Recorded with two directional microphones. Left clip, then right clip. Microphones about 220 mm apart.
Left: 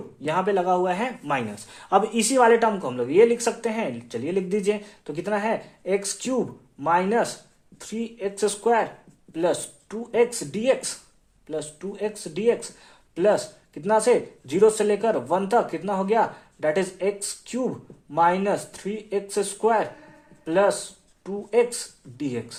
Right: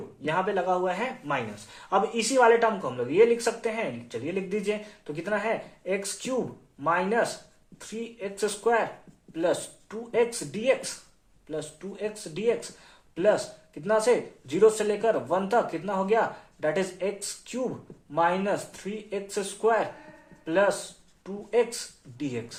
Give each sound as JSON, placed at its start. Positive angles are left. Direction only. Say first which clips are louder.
{"t": 0.2, "sound": "speech", "louder": "left 4 dB", "side_deg": 40}